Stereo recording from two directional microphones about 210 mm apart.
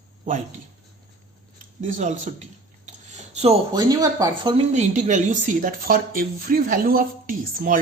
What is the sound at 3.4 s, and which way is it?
Speech, 20° right (ahead or behind).